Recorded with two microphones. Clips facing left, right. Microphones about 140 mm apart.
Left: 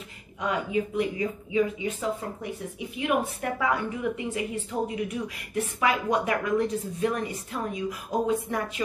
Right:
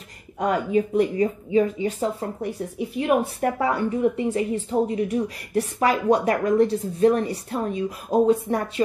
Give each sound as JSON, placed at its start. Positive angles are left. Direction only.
{"t": 0.4, "sound": "a woman's voice", "side_deg": -45}